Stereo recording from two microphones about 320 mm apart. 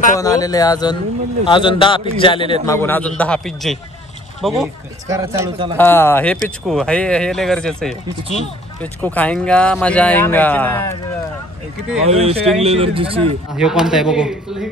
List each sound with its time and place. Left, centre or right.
0.2 s a man's voice: centre
5.8 s speech: centre
9.0 s speech: centre
12.0 s speech: centre
13.6 s speech: centre